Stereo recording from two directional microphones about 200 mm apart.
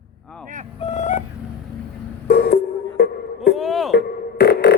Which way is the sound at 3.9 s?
55° left (ahead or behind).